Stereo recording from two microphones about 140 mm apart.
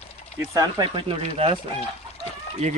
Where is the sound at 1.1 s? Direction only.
45° right (ahead or behind).